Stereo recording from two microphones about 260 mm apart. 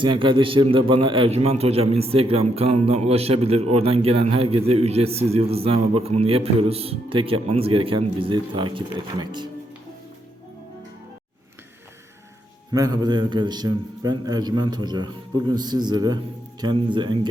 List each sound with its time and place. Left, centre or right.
0.0 s a man's voice: centre
12.7 s a man's voice: centre